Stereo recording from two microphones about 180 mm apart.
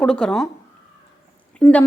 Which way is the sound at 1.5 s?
10° left (ahead or behind).